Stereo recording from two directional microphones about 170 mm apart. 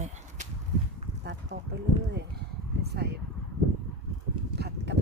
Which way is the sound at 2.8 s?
70° right (ahead or behind).